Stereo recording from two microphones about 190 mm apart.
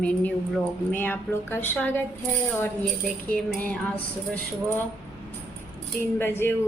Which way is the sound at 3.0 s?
5° left (ahead or behind).